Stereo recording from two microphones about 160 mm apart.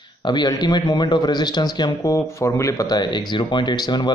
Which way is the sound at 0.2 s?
25° left (ahead or behind).